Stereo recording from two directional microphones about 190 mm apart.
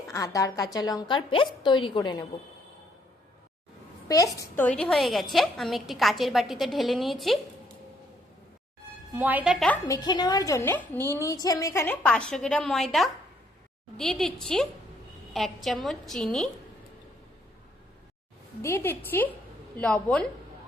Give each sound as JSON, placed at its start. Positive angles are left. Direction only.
{"t": 0.1, "sound": "a woman's voice", "side_deg": 20}
{"t": 4.4, "sound": "a woman's voice", "side_deg": 10}
{"t": 9.1, "sound": "a woman's voice", "side_deg": -10}
{"t": 9.8, "sound": "a woman's voice", "side_deg": 20}
{"t": 18.6, "sound": "a woman's voice", "side_deg": 10}